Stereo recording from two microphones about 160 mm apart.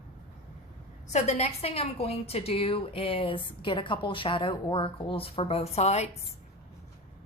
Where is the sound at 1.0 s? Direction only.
45° left (ahead or behind).